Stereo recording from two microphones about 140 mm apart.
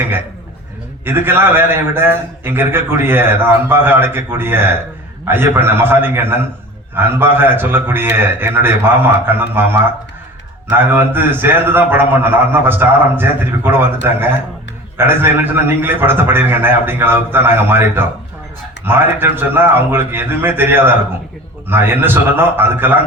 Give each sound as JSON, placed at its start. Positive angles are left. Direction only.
{"t": 1.0, "sound": "a man's voice", "side_deg": -15}